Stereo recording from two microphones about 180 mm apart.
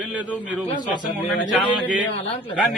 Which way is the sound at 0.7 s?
25° left (ahead or behind).